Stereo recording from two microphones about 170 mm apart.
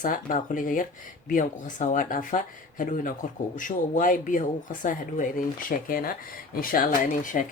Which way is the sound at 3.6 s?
50° left (ahead or behind).